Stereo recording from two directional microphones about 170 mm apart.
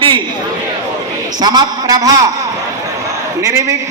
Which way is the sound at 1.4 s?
25° right (ahead or behind).